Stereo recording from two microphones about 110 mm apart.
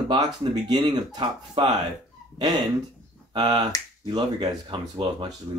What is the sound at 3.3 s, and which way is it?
Speech, 40° right (ahead or behind).